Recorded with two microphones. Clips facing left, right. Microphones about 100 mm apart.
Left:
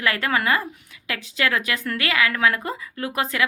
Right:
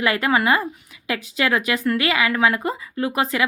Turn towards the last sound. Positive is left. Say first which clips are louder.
# right 3 dB
turn(degrees=-5)  # may be behind; listen again after turning